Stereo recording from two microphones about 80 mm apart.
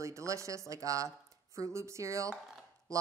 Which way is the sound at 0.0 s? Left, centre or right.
Right.